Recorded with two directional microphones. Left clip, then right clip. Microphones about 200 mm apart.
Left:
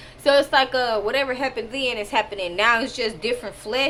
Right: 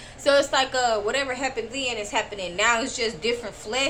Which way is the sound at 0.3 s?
25° left (ahead or behind).